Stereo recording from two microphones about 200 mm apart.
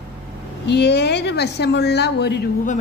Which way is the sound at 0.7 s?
55° left (ahead or behind).